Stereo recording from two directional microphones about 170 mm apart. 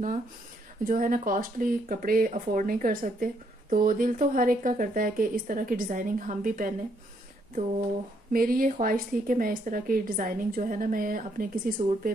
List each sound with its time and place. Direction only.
0.8 s speech: 55° right (ahead or behind)
8.3 s a woman's voice: 60° right (ahead or behind)